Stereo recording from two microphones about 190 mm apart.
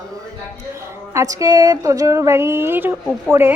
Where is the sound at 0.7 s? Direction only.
15° right (ahead or behind).